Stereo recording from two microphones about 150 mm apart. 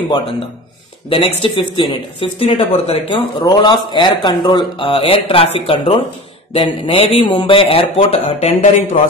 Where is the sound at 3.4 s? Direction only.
25° left (ahead or behind).